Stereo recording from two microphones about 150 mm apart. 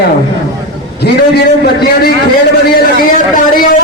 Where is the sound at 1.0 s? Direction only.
90° left.